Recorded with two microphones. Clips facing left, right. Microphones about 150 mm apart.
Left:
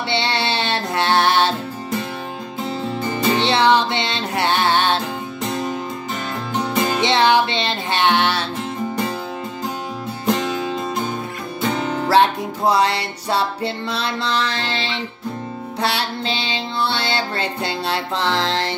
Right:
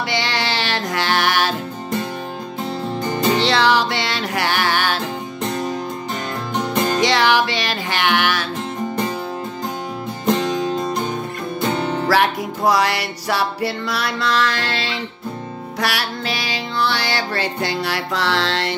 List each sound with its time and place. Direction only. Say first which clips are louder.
0.1 s music: left 4 dB; 30° left (ahead or behind)
2.6 s music: even; centre (ahead or behind)
3.3 s music: left 3 dB; 20° left (ahead or behind)
6.5 s music: even; 5° left (ahead or behind)
7.0 s music: left 2 dB; 25° left (ahead or behind)
10.2 s music: right 2 dB; centre (ahead or behind)
12.1 s music: left 4 dB; 25° left (ahead or behind)